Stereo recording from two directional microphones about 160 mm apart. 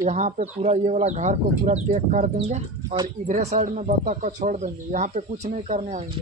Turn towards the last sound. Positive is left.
turn(degrees=-45)  # may be behind; listen again after turning